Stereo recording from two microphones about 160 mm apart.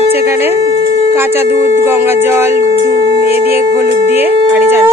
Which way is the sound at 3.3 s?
15° right (ahead or behind).